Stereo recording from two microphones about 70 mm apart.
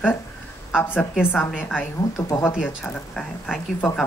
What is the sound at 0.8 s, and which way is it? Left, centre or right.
Speech, left.